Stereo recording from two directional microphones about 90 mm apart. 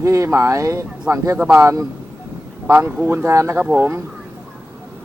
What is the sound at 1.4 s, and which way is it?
Speech, 25° right (ahead or behind).